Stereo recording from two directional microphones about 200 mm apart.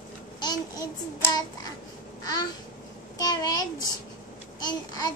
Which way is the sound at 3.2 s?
20° left (ahead or behind).